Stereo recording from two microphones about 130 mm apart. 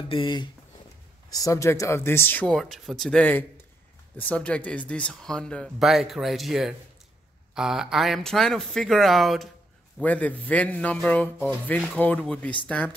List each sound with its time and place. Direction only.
0.1 s speech: 40° left (ahead or behind)
1.3 s speech: 25° left (ahead or behind)
2.4 s speech: 5° left (ahead or behind)
10.0 s a man's voice: 10° left (ahead or behind)